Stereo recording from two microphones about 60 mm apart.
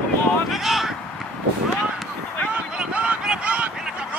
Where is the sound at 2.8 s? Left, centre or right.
Centre.